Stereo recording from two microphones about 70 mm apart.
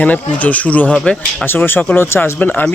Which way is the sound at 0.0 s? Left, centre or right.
Left.